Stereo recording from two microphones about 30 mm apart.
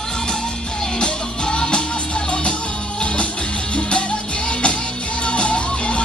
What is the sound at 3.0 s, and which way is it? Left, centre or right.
Music, left.